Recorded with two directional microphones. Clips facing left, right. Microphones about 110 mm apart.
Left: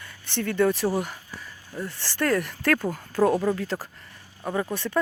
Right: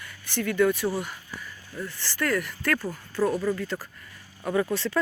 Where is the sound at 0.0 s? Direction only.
25° left (ahead or behind); by 3.8 s 40° left (ahead or behind).